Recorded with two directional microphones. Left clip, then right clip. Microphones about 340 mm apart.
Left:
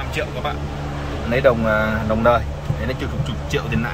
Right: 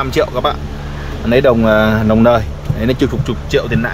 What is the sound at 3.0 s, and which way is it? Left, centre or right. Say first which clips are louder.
Speech: right 10 dB; centre.